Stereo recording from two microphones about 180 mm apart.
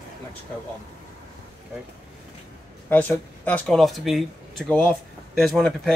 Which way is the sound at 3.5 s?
Centre (ahead or behind).